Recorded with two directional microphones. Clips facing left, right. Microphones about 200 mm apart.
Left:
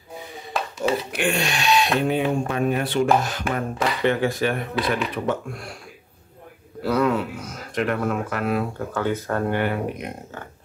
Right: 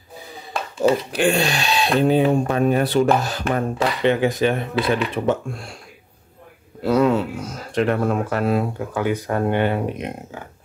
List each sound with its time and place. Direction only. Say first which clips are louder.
0.5 s dishes: left 1 dB; centre (ahead or behind)
1.1 s speech: right 5 dB; 35° right (ahead or behind)
3.5 s speech: right 3 dB; 25° right (ahead or behind)
4.7 s speech: right 3 dB; centre (ahead or behind)
5.1 s speech: right 4 dB; 25° right (ahead or behind)
6.8 s speech: right 4 dB; 25° right (ahead or behind)
8.7 s speech: right 2 dB; 15° right (ahead or behind)